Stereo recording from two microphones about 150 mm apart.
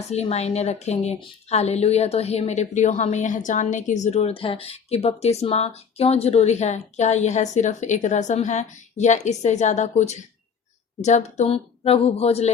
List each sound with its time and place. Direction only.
0.1 s a woman's voice: 45° left (ahead or behind)